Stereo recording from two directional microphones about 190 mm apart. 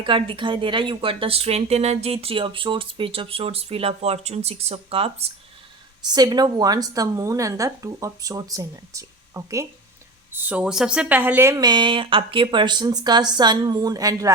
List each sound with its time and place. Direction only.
0.0 s speech: 25° right (ahead or behind)
6.1 s speech: 20° right (ahead or behind)